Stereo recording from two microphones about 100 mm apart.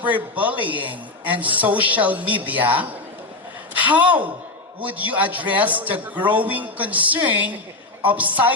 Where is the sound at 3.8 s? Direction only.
15° right (ahead or behind).